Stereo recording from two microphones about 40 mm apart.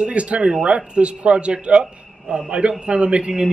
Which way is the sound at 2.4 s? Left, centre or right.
Right.